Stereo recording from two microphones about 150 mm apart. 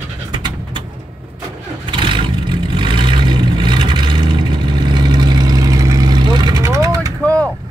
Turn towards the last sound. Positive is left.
turn(degrees=-20)  # may be behind; listen again after turning